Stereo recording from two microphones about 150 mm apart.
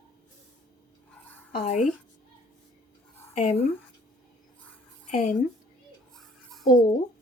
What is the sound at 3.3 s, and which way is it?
Speech, 50° left (ahead or behind).